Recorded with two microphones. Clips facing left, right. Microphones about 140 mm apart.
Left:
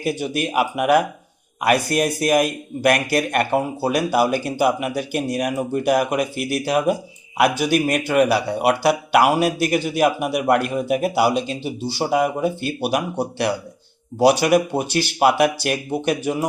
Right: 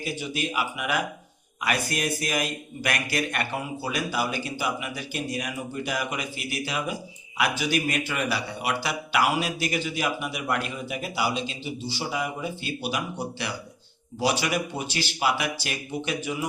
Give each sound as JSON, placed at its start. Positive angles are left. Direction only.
{"t": 0.0, "sound": "a man's voice", "side_deg": 55}
{"t": 4.1, "sound": "a man's voice", "side_deg": 60}